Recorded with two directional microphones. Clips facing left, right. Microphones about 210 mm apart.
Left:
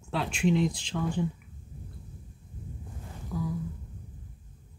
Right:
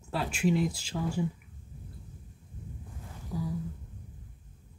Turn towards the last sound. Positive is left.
turn(degrees=-35)  # may be behind; listen again after turning